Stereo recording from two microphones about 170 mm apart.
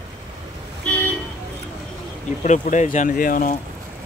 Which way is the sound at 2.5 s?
50° left (ahead or behind).